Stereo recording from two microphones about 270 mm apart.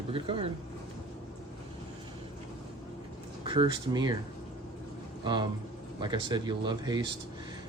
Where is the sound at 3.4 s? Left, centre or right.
Centre.